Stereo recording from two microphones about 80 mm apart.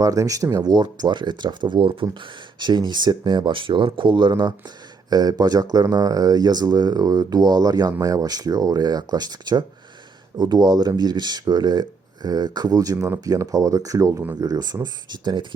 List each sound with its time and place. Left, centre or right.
0.0 s speech: right
0.5 s speech: right
2.6 s speech: right
5.1 s speech: right
14.4 s speech: right